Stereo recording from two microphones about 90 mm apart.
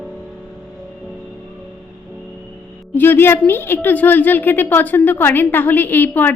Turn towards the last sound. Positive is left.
turn(degrees=20)  # may be behind; listen again after turning